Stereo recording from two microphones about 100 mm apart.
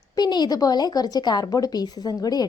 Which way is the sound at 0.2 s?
45° left (ahead or behind).